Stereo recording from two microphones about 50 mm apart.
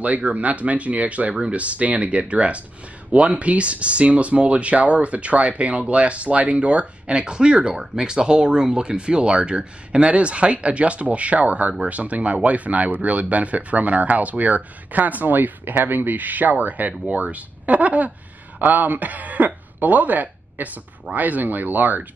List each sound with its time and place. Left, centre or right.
0.0 s speech: right